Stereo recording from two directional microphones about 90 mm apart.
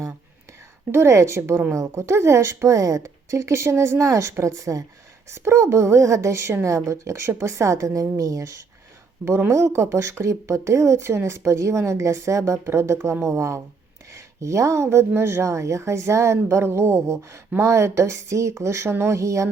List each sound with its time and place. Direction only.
0.9 s speech: 30° right (ahead or behind)